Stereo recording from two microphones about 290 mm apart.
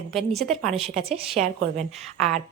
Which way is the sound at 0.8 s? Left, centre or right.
Right.